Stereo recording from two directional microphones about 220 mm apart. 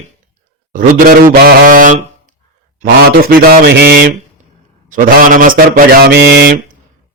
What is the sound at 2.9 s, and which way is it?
A man's voice, 40° right (ahead or behind).